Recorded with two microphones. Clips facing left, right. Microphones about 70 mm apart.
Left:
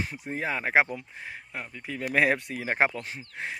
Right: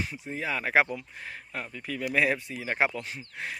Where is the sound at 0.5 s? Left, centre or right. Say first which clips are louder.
Even; left.